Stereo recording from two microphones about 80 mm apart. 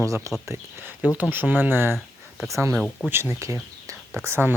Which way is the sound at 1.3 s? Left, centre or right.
Right.